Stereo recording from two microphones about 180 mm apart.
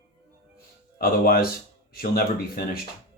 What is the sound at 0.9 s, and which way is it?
Speech, 55° left (ahead or behind).